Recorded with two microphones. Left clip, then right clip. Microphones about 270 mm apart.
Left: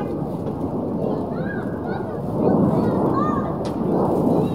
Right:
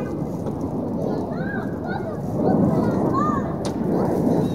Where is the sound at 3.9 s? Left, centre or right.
Right.